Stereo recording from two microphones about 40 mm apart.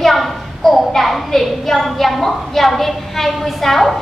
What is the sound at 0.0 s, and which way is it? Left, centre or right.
A woman's voice, centre.